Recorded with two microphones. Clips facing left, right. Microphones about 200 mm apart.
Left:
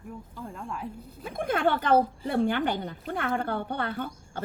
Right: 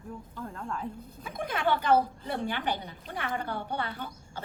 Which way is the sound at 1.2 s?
55° left (ahead or behind).